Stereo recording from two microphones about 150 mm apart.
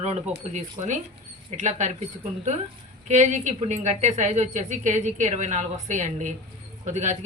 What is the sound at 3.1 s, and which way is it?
A woman's voice, 50° right (ahead or behind).